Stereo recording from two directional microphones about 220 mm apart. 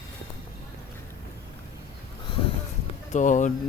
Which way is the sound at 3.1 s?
35° left (ahead or behind).